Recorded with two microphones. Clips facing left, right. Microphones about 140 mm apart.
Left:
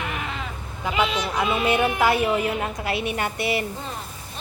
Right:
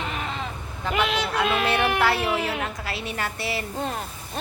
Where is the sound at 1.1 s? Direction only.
85° right.